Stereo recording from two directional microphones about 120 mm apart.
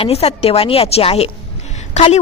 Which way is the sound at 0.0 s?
55° left (ahead or behind).